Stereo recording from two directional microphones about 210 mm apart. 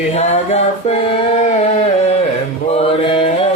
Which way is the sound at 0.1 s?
30° left (ahead or behind).